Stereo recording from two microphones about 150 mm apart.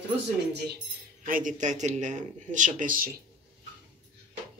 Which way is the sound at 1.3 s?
65° right (ahead or behind).